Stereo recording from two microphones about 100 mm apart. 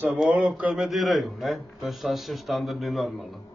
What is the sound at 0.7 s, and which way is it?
Speech, centre (ahead or behind).